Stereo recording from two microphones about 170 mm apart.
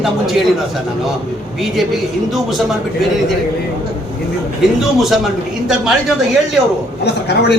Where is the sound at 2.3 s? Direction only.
Centre (ahead or behind).